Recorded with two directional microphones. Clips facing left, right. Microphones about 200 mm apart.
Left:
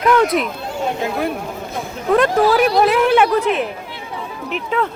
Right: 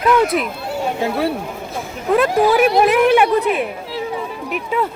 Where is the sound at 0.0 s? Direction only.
Centre (ahead or behind).